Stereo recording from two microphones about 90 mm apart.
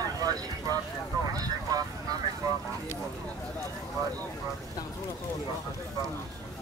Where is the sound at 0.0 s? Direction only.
45° right (ahead or behind).